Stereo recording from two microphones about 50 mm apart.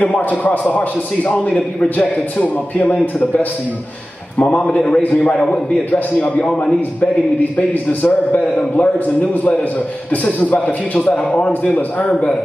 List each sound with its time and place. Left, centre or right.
0.0 s a man's voice: left
4.4 s a man's voice: left
5.9 s a man's voice: left
6.4 s a man's voice: left
7.5 s a man's voice: left